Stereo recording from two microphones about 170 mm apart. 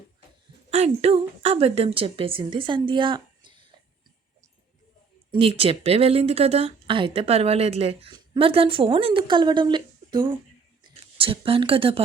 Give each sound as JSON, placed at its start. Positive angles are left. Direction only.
{"t": 0.7, "sound": "a woman's voice", "side_deg": -35}
{"t": 5.3, "sound": "a woman's voice", "side_deg": -35}